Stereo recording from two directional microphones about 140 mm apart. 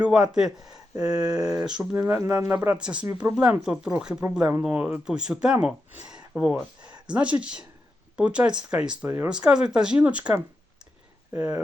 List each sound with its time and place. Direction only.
0.0 s speech: 5° right (ahead or behind)
0.9 s a sound: 25° right (ahead or behind)
1.3 s speech: 5° right (ahead or behind)